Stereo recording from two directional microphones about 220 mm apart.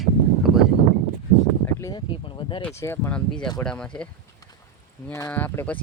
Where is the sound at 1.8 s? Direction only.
20° left (ahead or behind).